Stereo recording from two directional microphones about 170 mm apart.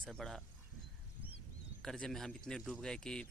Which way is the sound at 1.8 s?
Centre (ahead or behind).